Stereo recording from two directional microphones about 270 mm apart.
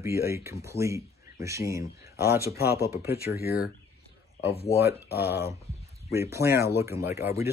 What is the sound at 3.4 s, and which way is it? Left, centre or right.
Speech, left.